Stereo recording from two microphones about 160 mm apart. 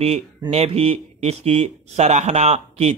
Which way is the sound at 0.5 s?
40° right (ahead or behind).